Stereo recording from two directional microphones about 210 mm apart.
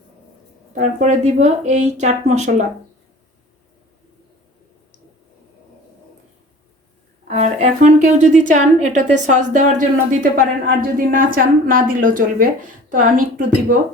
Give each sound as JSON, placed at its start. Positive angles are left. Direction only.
{"t": 0.7, "sound": "a woman's voice", "side_deg": -35}
{"t": 7.3, "sound": "a woman's voice", "side_deg": -35}